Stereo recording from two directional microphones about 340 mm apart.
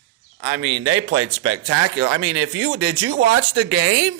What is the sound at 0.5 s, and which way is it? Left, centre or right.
Speech, right.